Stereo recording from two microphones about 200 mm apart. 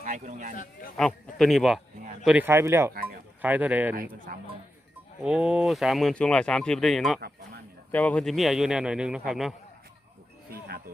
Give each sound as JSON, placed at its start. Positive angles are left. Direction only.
{"t": 0.0, "sound": "speech", "side_deg": -40}
{"t": 0.5, "sound": "speech", "side_deg": 40}
{"t": 0.9, "sound": "speech", "side_deg": 0}
{"t": 5.2, "sound": "speech", "side_deg": -5}
{"t": 7.2, "sound": "a sound", "side_deg": -50}
{"t": 7.9, "sound": "speech", "side_deg": 5}